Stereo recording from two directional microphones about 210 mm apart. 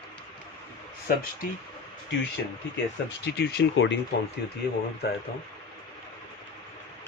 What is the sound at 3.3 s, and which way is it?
Speech, 50° left (ahead or behind).